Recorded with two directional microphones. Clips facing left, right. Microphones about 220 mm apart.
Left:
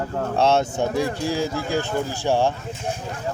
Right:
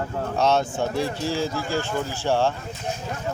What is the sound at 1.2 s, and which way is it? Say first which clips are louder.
Speech: left 2 dB; 15° left (ahead or behind).